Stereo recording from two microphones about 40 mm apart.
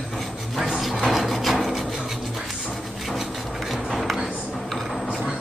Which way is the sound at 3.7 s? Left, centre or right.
Centre.